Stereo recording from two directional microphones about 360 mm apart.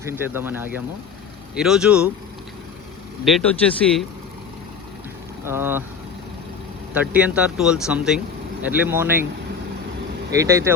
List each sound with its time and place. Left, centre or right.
0.0 s speech: centre
3.2 s speech: centre
5.5 s speech: centre
6.9 s speech: centre
10.3 s speech: centre